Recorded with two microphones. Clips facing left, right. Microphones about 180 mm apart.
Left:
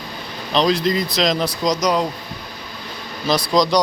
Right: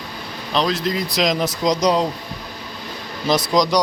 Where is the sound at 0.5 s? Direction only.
5° right (ahead or behind).